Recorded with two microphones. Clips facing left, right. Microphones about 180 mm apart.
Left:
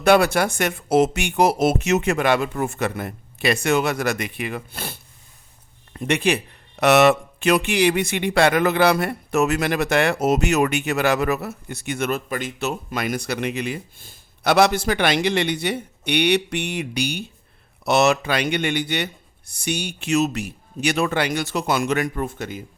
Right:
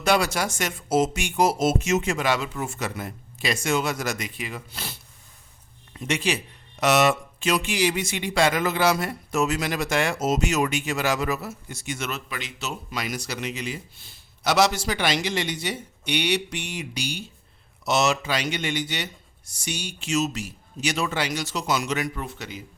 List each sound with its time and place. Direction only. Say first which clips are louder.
0.0 s speech: left 6 dB; 55° left (ahead or behind)